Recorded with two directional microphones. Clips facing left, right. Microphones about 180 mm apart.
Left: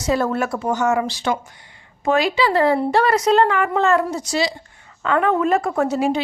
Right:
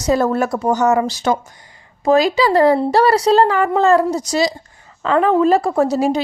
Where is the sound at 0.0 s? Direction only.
40° right (ahead or behind).